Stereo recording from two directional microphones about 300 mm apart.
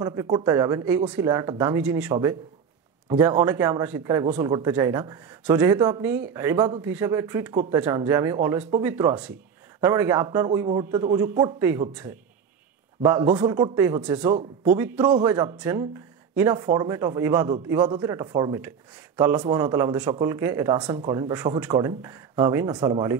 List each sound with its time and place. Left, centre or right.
0.0 s a man's voice: centre
13.0 s a man's voice: centre